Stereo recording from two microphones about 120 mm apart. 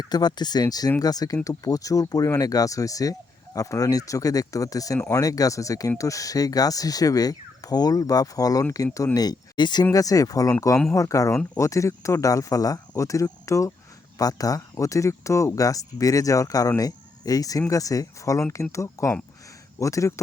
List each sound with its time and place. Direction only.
0.0 s speech: 35° left (ahead or behind)